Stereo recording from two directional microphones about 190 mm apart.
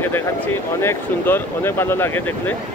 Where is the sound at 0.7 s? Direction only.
10° left (ahead or behind).